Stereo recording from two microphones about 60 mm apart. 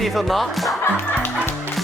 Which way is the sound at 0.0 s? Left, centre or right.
Centre.